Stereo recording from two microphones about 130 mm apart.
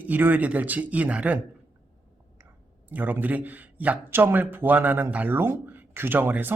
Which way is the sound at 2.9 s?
15° right (ahead or behind).